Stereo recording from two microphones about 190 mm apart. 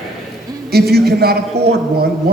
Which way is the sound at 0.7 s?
55° right (ahead or behind).